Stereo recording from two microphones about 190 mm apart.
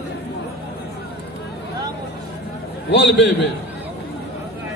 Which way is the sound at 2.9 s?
65° left (ahead or behind).